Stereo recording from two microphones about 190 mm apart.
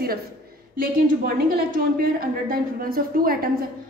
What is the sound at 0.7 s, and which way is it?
A woman's voice, 50° right (ahead or behind).